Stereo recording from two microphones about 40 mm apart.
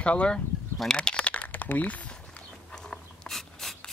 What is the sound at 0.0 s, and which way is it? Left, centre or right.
Speech, left.